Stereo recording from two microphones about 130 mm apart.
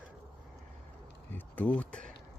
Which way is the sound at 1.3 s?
15° left (ahead or behind).